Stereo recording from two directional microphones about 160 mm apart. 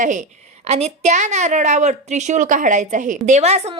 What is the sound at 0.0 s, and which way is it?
A woman's voice, 50° right (ahead or behind).